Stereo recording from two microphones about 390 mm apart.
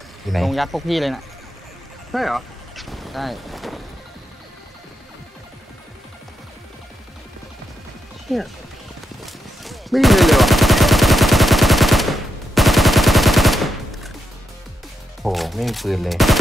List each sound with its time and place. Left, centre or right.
0.3 s speech: centre
2.1 s a sound: centre
8.3 s speech: centre
9.2 s gunshot: centre
15.2 s speech: centre